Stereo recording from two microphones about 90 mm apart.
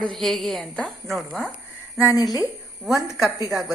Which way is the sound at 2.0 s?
45° left (ahead or behind).